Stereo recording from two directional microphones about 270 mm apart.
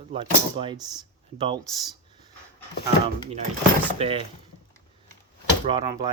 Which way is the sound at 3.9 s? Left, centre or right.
Right.